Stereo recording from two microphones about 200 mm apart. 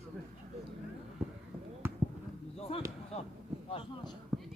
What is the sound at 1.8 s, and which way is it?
Basketball bounce, 10° right (ahead or behind).